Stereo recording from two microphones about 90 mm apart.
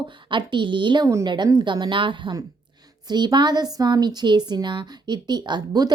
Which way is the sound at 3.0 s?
55° right (ahead or behind).